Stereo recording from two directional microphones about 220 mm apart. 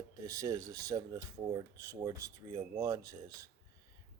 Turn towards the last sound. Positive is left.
turn(degrees=-15)  # may be behind; listen again after turning